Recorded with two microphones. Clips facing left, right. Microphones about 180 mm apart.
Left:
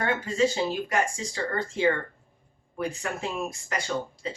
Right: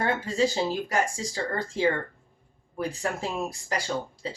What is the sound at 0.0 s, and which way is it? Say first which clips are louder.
Speech: even; 35° right (ahead or behind).